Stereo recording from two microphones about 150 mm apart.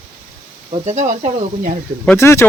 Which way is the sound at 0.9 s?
50° right (ahead or behind).